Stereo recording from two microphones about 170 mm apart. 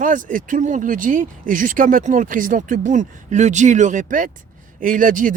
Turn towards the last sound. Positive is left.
turn(degrees=-50)  # may be behind; listen again after turning